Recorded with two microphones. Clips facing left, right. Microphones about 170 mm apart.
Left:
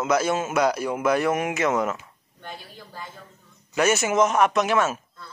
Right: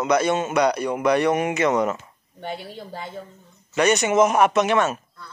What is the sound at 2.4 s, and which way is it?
Speech, 70° right (ahead or behind).